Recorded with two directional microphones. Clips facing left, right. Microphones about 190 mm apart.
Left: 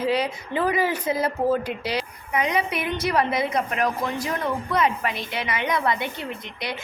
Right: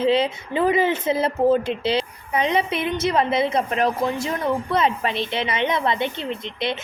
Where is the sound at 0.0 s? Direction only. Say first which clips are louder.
Right 4 dB; 25° right (ahead or behind).